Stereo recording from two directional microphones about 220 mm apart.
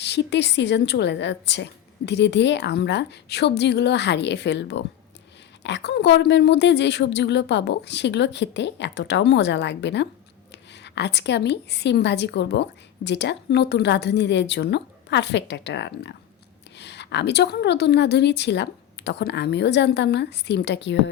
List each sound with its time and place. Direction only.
0.0 s a woman's voice: 50° left (ahead or behind)